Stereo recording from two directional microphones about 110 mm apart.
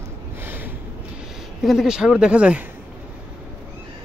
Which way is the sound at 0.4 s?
20° right (ahead or behind).